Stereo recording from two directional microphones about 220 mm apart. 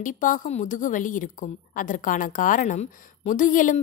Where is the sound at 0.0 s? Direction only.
35° left (ahead or behind).